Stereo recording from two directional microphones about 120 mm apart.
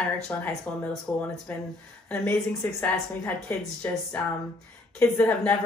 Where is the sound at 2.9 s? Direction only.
15° left (ahead or behind).